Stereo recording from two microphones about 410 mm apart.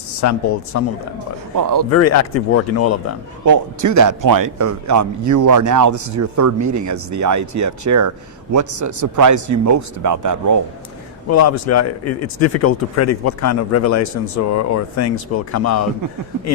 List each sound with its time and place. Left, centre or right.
0.2 s speech: left
1.5 s a man's voice: right
1.9 s speech: left
3.4 s a man's voice: right
11.3 s speech: left